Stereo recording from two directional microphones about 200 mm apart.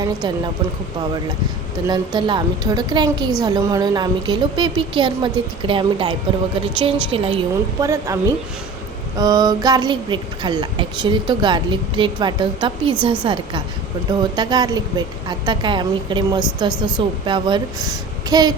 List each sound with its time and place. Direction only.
1.9 s speech: 20° right (ahead or behind)
7.8 s speech: 15° right (ahead or behind)